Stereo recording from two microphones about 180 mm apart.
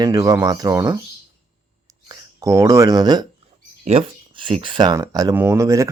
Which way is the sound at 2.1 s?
20° right (ahead or behind).